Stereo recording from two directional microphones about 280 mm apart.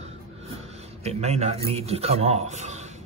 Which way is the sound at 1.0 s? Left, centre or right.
Right.